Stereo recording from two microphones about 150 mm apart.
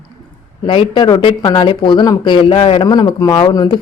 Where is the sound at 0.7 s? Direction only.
35° left (ahead or behind).